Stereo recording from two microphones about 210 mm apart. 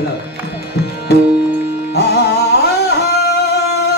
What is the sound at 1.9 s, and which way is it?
Music, 50° left (ahead or behind).